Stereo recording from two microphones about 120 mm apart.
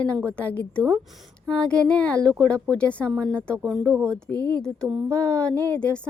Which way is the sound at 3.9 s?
25° right (ahead or behind).